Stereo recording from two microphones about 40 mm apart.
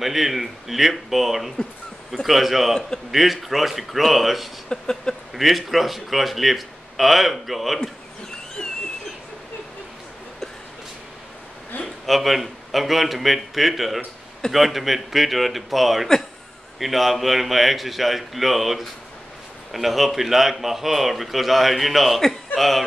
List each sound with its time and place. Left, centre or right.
0.0 s a man's voice: centre
4.6 s a sound: centre
5.3 s a man's voice: centre
12.1 s a man's voice: centre